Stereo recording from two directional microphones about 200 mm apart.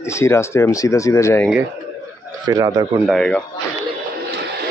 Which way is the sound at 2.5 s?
20° right (ahead or behind).